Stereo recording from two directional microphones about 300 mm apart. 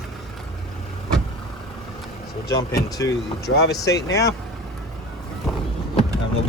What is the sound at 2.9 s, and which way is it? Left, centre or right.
Speech, centre.